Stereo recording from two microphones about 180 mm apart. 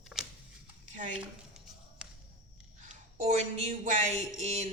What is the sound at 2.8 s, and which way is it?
Speech, 40° right (ahead or behind).